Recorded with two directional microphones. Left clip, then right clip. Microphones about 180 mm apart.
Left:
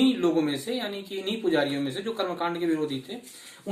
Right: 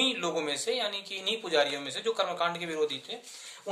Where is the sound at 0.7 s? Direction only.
20° right (ahead or behind).